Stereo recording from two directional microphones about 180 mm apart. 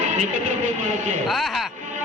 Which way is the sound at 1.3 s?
Centre (ahead or behind).